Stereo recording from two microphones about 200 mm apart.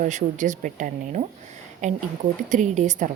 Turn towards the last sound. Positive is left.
turn(degrees=-35)  # may be behind; listen again after turning